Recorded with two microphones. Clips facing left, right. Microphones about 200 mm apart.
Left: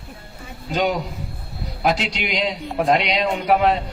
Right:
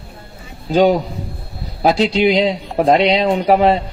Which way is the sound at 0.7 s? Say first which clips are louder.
Right 9 dB; 30° right (ahead or behind).